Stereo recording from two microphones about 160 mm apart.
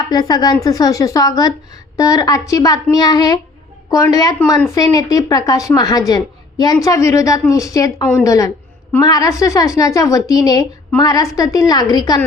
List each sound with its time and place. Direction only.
0.0 s a woman's voice: 25° left (ahead or behind)